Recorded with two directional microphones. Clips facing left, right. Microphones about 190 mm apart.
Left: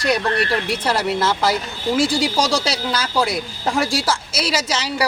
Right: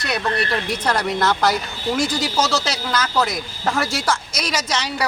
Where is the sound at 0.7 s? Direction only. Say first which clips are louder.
Left 1 dB; 5° left (ahead or behind).